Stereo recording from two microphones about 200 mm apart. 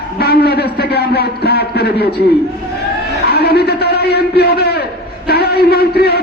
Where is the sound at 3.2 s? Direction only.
55° left (ahead or behind).